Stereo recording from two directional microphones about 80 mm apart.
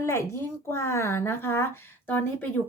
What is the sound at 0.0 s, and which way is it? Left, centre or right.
A woman's voice, left.